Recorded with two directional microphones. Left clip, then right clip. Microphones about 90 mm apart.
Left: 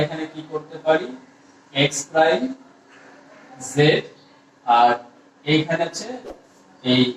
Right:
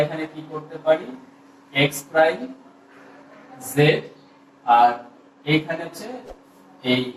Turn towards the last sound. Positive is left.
turn(degrees=35)  # may be behind; listen again after turning